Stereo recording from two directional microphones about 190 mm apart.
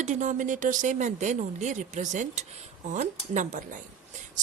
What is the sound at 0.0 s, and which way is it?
A woman's voice, 40° right (ahead or behind).